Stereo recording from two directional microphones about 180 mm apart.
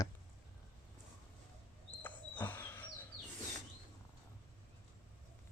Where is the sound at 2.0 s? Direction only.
10° left (ahead or behind).